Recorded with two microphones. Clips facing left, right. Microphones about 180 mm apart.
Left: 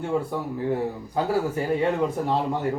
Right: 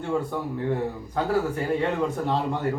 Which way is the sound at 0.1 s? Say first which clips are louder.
Right 1 dB; 10° left (ahead or behind).